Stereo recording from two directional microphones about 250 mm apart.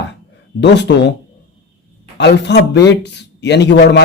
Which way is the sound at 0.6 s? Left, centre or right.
Left.